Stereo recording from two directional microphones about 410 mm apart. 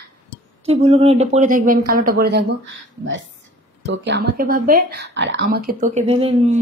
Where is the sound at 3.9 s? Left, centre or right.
Right.